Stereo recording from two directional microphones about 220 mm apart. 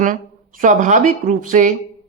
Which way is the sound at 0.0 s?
35° right (ahead or behind).